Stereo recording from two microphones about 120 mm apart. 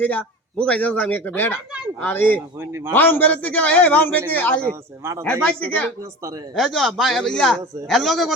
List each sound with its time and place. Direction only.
0.0 s a man's voice: 15° left (ahead or behind)
2.6 s a man's voice: 20° right (ahead or behind)
2.9 s a man's voice: 15° left (ahead or behind)
4.6 s a man's voice: 25° right (ahead or behind)
5.2 s a man's voice: 10° left (ahead or behind)
6.0 s a man's voice: 25° right (ahead or behind)
6.5 s a man's voice: 5° left (ahead or behind)